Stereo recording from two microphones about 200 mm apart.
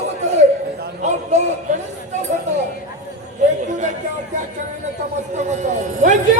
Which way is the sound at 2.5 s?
35° right (ahead or behind).